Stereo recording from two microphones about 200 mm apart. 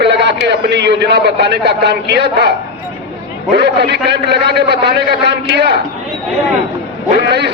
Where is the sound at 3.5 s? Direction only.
55° right (ahead or behind).